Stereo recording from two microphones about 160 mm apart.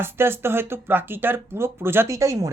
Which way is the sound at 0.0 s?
15° right (ahead or behind).